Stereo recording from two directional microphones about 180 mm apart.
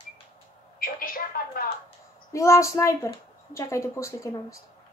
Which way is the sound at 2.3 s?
15° left (ahead or behind).